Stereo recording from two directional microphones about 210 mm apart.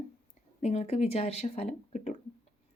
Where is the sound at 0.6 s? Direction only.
30° left (ahead or behind).